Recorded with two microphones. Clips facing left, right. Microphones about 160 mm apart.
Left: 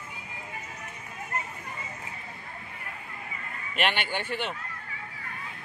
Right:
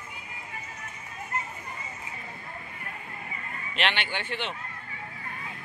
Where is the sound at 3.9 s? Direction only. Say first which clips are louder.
Left 2 dB; 45° left (ahead or behind).